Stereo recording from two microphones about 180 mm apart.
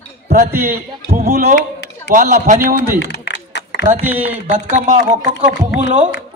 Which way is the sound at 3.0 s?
75° left (ahead or behind).